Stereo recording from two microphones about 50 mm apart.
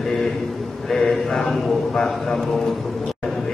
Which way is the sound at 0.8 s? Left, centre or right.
Centre.